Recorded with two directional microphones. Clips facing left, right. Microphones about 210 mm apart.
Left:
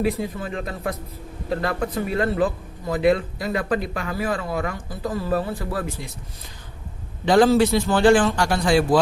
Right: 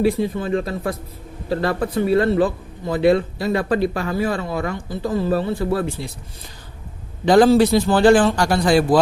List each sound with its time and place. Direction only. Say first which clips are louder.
0.0 s speech: right 5 dB; 30° right (ahead or behind)
7.3 s a man's voice: right 3 dB; 35° right (ahead or behind)